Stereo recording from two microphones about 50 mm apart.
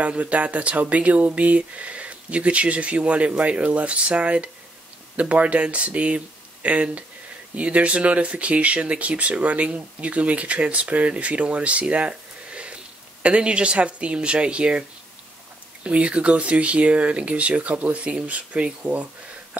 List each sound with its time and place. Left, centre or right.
0.0 s speech: right